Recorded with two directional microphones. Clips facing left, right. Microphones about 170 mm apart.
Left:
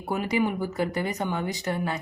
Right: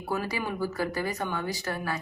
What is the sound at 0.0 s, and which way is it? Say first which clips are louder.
A woman's voice: left 5 dB; 20° left (ahead or behind).